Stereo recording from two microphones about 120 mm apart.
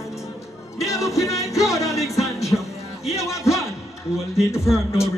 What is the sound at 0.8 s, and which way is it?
Music, 25° left (ahead or behind).